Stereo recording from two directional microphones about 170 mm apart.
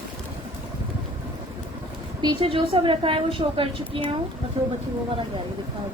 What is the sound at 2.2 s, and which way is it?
A woman's voice, 30° right (ahead or behind).